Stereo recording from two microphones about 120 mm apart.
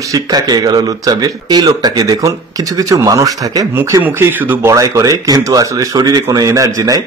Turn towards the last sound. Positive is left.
turn(degrees=-30)  # may be behind; listen again after turning